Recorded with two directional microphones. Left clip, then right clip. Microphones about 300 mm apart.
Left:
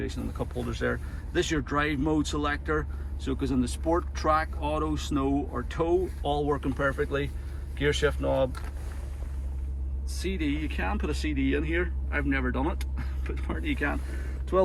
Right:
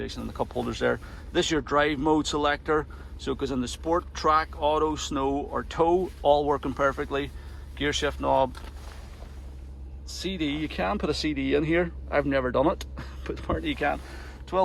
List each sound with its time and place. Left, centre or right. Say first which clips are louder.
0.0 s speech: right 3 dB; centre
10.1 s speech: right 1 dB; centre